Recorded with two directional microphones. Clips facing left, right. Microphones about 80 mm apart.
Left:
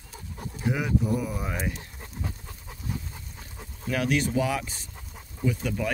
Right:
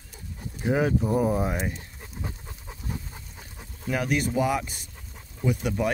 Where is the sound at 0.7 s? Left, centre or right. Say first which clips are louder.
Right 3 dB; right.